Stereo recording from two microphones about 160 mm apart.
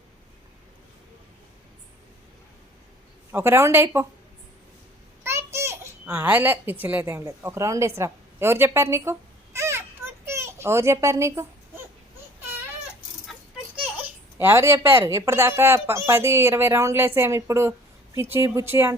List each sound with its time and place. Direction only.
3.3 s speech: 15° right (ahead or behind)
5.2 s a sound: 15° right (ahead or behind)
13.8 s speech: 10° right (ahead or behind)